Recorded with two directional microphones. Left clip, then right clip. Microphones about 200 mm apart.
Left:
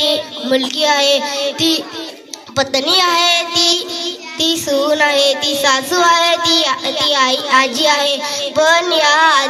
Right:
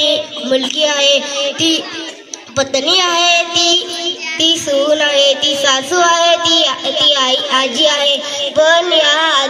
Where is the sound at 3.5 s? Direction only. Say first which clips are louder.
Right 2 dB; 90° left.